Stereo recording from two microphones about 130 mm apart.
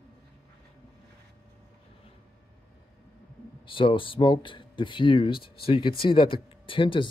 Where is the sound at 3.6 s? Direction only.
40° left (ahead or behind).